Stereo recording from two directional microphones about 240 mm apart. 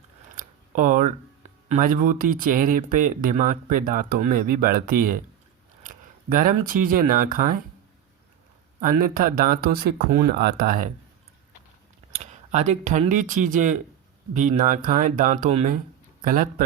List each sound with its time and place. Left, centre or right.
0.3 s a sound: right
1.7 s speech: right
8.8 s speech: right
12.1 s speech: right